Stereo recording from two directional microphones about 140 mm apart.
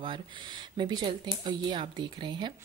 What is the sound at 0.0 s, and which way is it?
Speech, 35° right (ahead or behind).